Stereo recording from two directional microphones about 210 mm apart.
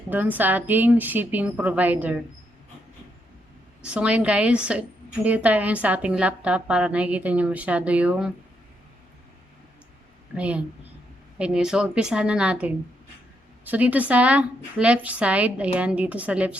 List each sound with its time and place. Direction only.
0.1 s a woman's voice: 10° right (ahead or behind)
3.8 s a woman's voice: 5° right (ahead or behind)
10.3 s a woman's voice: 5° right (ahead or behind)